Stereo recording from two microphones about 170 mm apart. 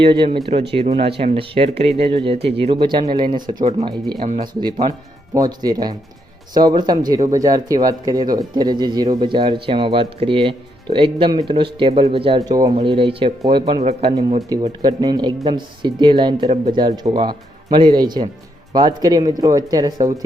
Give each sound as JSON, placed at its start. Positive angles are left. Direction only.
{"t": 0.0, "sound": "speech", "side_deg": -30}
{"t": 3.6, "sound": "speech", "side_deg": -40}
{"t": 4.4, "sound": "speech", "side_deg": -25}
{"t": 12.4, "sound": "speech", "side_deg": -20}